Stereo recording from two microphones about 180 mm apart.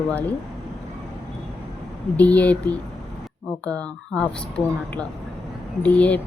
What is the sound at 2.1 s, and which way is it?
A woman's voice, 10° left (ahead or behind).